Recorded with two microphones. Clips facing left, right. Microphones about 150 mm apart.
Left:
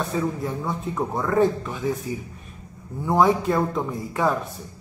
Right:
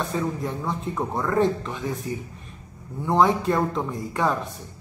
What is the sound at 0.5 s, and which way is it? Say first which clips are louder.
Speech: left 1 dB; centre (ahead or behind).